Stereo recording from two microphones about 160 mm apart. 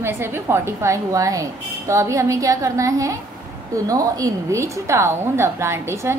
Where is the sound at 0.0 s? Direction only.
15° right (ahead or behind).